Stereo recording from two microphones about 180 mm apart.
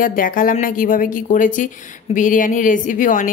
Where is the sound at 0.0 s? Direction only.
50° left (ahead or behind).